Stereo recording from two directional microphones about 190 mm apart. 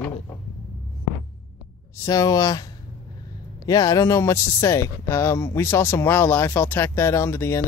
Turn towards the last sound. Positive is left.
turn(degrees=15)  # may be behind; listen again after turning